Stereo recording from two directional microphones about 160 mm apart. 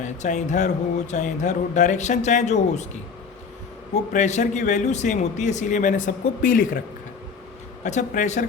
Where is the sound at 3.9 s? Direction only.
45° left (ahead or behind).